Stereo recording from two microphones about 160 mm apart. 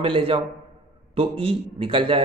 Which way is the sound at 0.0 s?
35° right (ahead or behind).